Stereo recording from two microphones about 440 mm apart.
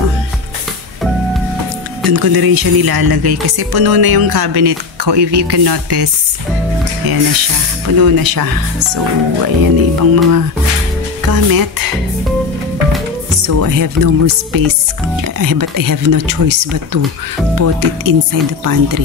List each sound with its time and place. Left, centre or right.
2.0 s speech: right
8.0 s speech: right
13.4 s speech: right